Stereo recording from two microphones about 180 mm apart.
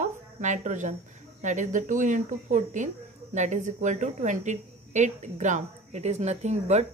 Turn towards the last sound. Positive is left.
turn(degrees=-40)  # may be behind; listen again after turning